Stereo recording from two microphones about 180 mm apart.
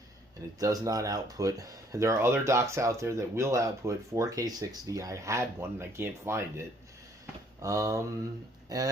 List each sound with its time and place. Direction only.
0.6 s speech: 20° right (ahead or behind)